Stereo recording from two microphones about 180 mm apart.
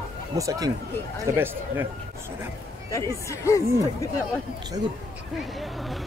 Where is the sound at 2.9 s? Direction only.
15° left (ahead or behind).